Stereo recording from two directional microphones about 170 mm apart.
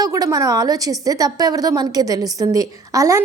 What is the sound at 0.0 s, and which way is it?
A woman's voice, 20° right (ahead or behind).